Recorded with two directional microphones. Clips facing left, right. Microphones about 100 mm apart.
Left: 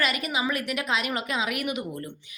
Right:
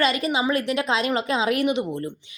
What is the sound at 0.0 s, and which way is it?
A woman's voice, 25° right (ahead or behind).